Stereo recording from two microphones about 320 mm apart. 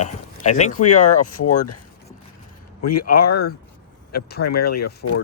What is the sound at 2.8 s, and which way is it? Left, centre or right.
Speech, left.